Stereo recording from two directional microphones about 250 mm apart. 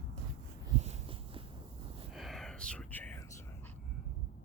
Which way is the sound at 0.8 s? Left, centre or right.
Right.